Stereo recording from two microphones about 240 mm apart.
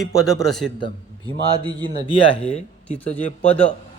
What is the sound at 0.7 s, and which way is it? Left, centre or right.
Speech, centre.